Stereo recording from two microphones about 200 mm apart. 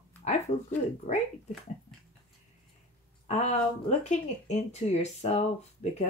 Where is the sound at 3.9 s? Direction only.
35° left (ahead or behind).